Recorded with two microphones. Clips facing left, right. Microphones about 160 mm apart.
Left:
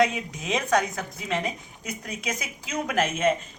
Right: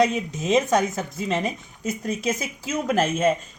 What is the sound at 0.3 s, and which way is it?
Speech, 25° right (ahead or behind).